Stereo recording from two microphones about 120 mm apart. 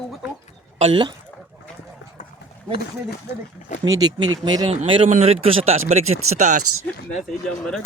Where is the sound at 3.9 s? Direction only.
35° right (ahead or behind); by 6.6 s 80° right.